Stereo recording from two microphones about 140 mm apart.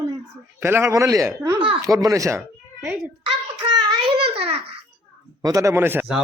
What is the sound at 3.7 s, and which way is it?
Child singing, 30° right (ahead or behind).